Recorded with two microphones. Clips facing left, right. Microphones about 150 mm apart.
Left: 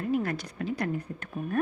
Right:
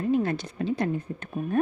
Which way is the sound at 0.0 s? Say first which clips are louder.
Right 4 dB; 25° right (ahead or behind).